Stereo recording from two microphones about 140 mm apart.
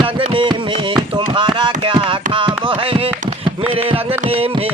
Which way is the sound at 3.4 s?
40° right (ahead or behind).